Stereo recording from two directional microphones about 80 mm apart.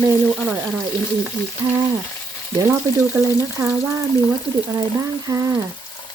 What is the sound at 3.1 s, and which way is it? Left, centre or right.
Speech, right.